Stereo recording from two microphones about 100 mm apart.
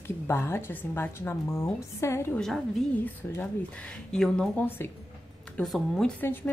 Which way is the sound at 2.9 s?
15° left (ahead or behind).